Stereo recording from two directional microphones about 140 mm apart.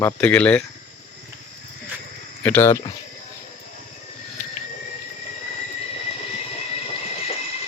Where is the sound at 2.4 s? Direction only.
15° left (ahead or behind).